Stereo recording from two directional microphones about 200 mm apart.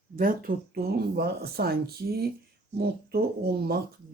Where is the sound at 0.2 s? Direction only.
45° right (ahead or behind).